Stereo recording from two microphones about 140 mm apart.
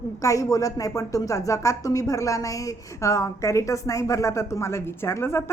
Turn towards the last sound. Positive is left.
turn(degrees=20)  # may be behind; listen again after turning